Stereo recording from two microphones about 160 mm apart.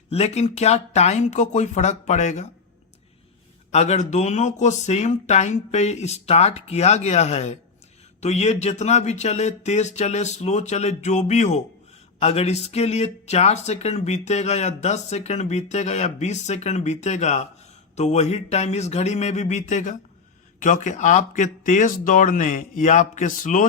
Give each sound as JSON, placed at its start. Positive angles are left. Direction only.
{"t": 0.1, "sound": "speech", "side_deg": 40}
{"t": 3.7, "sound": "speech", "side_deg": 45}